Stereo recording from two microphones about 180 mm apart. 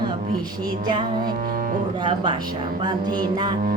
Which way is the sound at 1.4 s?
50° right (ahead or behind).